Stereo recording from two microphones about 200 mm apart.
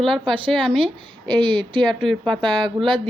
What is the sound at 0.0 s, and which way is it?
A woman's voice, centre (ahead or behind).